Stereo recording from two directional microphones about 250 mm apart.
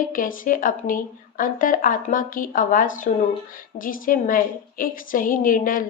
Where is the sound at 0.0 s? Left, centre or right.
Left.